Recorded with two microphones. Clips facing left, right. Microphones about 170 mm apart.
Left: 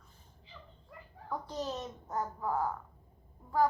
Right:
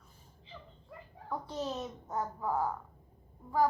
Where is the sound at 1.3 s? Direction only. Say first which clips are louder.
Even; centre (ahead or behind).